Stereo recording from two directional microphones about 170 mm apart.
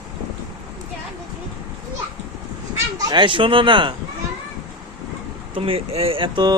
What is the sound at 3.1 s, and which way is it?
Speech, 25° right (ahead or behind).